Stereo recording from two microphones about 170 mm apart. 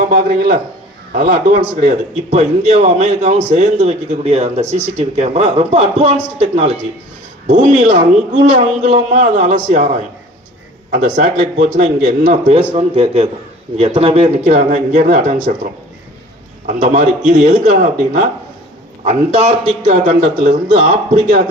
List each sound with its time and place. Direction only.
0.1 s a man's voice: 60° right (ahead or behind)
2.3 s a man's voice: 40° right (ahead or behind)
12.7 s a man's voice: 35° right (ahead or behind)
14.4 s a man's voice: 45° right (ahead or behind)
20.1 s a man's voice: 50° right (ahead or behind)